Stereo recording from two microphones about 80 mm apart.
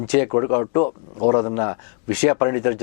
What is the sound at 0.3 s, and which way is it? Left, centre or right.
Speech, left.